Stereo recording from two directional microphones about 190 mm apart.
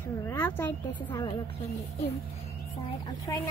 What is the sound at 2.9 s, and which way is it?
Speech, 20° left (ahead or behind).